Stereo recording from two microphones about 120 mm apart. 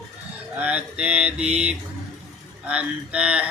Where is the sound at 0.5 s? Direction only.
10° right (ahead or behind).